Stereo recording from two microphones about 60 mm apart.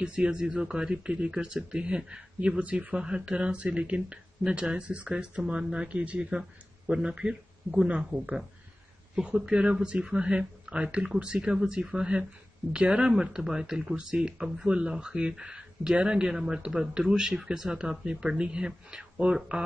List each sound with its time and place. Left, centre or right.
0.0 s speech: centre